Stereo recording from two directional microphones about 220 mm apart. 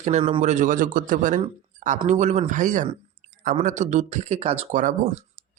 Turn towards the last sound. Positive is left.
turn(degrees=-35)  # may be behind; listen again after turning